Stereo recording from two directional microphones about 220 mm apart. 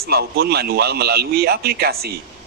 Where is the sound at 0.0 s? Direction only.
45° right (ahead or behind).